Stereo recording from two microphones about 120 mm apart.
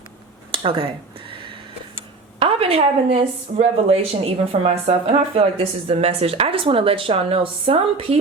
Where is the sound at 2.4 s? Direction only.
55° right (ahead or behind).